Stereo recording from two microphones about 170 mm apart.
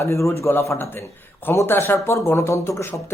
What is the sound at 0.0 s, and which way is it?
A man's voice, 15° left (ahead or behind).